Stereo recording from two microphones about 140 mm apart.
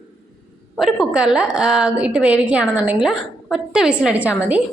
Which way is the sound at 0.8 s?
Centre (ahead or behind).